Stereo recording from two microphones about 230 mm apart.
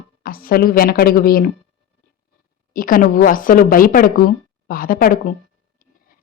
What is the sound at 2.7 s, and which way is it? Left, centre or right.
Speech, left.